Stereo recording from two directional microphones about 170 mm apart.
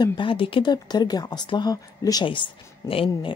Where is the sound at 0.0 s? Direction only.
30° left (ahead or behind).